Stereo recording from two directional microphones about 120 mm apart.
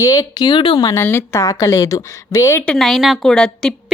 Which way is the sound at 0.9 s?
20° left (ahead or behind).